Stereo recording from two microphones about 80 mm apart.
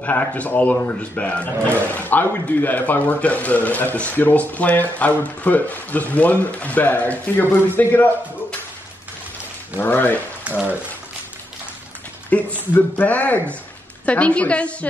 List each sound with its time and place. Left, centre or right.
0.0 s a man's voice: centre
9.8 s a man's voice: left
10.5 s speech: centre
12.3 s a man's voice: centre